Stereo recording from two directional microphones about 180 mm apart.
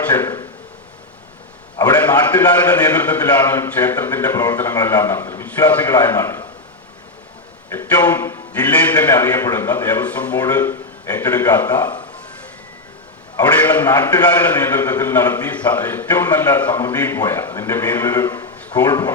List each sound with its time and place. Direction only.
0.1 s a man's voice: 10° left (ahead or behind)
2.1 s a man's voice: 20° left (ahead or behind)
2.7 s a man's voice: 10° left (ahead or behind)
7.7 s a man's voice: 15° left (ahead or behind)
13.4 s a man's voice: 10° left (ahead or behind)
13.9 s a man's voice: 20° left (ahead or behind)